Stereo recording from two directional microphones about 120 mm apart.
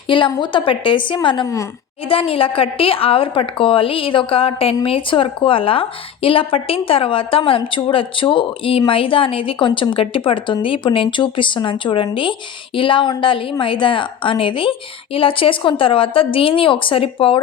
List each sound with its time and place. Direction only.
0.1 s a woman's voice: 45° left (ahead or behind)